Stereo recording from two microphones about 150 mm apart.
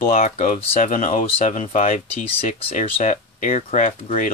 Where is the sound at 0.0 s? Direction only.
65° left (ahead or behind).